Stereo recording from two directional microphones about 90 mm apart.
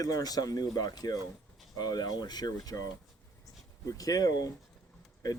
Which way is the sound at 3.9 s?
40° left (ahead or behind).